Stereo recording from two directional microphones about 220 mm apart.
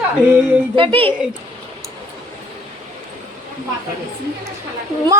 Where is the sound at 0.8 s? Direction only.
25° right (ahead or behind).